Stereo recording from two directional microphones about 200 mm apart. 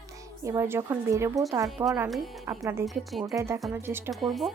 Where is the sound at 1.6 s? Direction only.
Centre (ahead or behind).